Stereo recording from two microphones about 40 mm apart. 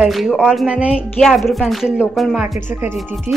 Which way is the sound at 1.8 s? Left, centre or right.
Right.